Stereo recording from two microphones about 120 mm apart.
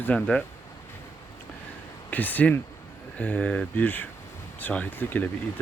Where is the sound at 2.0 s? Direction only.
15° left (ahead or behind).